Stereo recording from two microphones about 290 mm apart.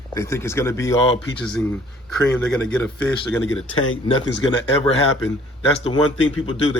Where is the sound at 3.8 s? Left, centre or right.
Left.